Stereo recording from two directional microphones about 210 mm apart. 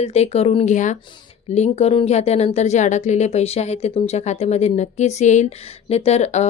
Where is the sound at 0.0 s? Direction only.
30° left (ahead or behind).